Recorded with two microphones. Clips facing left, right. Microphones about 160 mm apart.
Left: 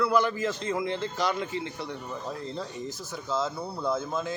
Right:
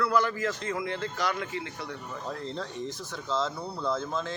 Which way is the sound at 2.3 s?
5° left (ahead or behind).